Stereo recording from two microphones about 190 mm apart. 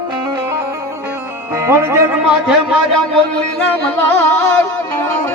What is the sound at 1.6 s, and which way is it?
Speech, 15° right (ahead or behind).